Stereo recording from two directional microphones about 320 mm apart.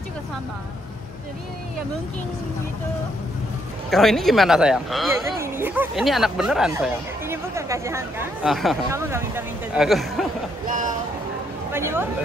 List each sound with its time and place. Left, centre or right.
3.9 s speech: centre
10.7 s speech: right
11.7 s speech: centre